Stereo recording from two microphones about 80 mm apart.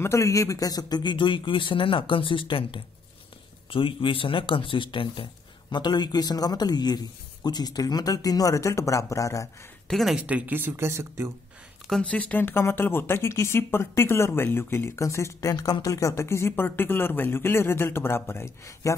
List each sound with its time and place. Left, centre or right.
0.0 s speech: left
9.8 s speech: centre
10.2 s speech: right
12.0 s speech: centre; by 15.5 s left
15.5 s speech: left
18.7 s speech: left